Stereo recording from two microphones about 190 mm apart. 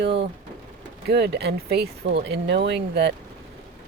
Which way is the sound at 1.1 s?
60° right (ahead or behind).